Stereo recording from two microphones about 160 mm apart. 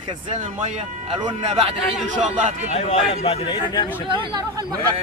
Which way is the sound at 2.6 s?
45° left (ahead or behind).